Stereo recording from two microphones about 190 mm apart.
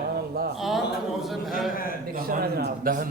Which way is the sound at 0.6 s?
Centre (ahead or behind).